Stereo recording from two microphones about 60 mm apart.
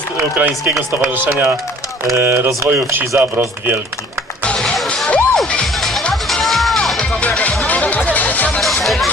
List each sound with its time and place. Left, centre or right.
0.3 s speech: right
4.4 s music: centre
6.2 s music: centre
7.1 s music: left
8.8 s music: centre